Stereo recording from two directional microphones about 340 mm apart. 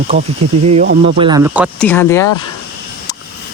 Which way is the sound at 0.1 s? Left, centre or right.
Centre.